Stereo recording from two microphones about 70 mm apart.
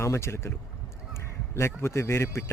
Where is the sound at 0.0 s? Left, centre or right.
Left.